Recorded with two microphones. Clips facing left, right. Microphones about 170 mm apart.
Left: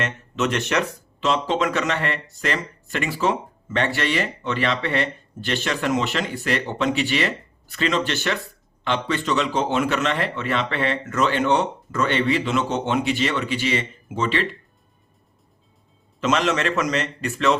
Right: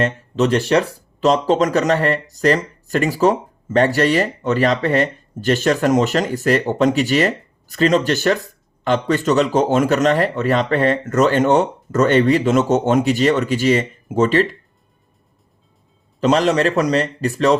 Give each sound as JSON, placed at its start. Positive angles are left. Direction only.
{"t": 0.0, "sound": "speech", "side_deg": -35}
{"t": 16.2, "sound": "speech", "side_deg": -35}